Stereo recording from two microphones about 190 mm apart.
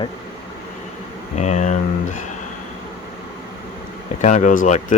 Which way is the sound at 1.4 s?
40° left (ahead or behind).